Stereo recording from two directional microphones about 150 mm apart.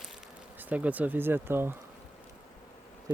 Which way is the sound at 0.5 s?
10° right (ahead or behind).